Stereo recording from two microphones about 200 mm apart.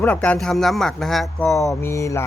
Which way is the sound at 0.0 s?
5° left (ahead or behind).